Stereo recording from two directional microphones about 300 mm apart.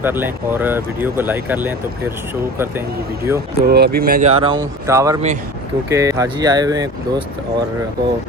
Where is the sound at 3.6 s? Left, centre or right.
Right.